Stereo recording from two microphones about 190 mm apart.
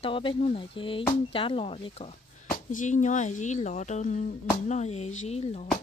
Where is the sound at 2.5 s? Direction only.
45° left (ahead or behind).